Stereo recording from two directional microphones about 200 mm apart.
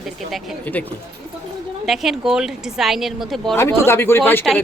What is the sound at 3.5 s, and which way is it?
Speech, 15° left (ahead or behind).